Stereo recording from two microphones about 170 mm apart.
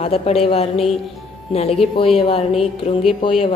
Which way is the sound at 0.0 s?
35° left (ahead or behind).